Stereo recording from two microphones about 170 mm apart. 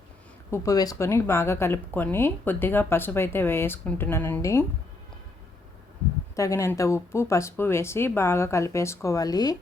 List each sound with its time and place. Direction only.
0.5 s speech: 20° left (ahead or behind)
6.3 s speech: 20° left (ahead or behind)